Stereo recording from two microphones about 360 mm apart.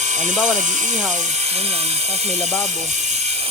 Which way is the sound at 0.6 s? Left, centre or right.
Centre.